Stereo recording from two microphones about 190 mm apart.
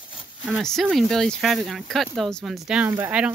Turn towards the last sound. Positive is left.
turn(degrees=-5)  # may be behind; listen again after turning